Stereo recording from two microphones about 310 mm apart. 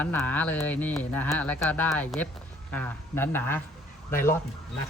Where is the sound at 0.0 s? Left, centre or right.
Centre.